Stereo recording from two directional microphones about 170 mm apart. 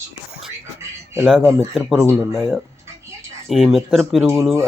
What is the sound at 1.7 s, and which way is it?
Speech, centre (ahead or behind).